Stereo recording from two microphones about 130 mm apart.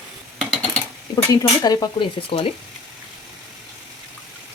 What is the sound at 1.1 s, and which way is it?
Stir, 30° left (ahead or behind).